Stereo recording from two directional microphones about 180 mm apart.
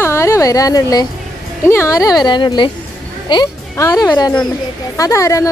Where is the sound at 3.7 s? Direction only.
15° left (ahead or behind).